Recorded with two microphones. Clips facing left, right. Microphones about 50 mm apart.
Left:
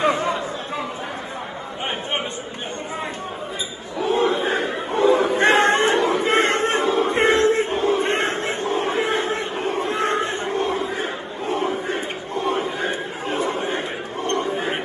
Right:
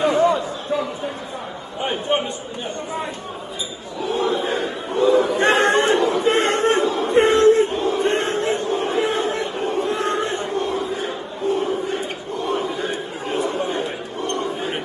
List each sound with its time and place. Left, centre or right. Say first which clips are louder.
0.0 s chatter: right 3 dB; left
1.9 s chatter: right 5 dB; left
4.0 s chatter: left 2 dB; left